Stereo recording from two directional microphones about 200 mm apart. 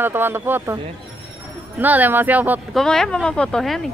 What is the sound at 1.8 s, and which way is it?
Speech, 10° right (ahead or behind).